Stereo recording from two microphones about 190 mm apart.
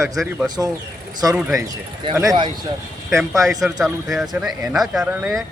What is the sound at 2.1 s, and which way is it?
Speech, 20° right (ahead or behind).